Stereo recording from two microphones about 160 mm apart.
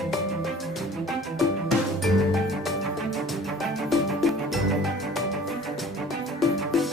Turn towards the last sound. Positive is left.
turn(degrees=0)  # may be behind; listen again after turning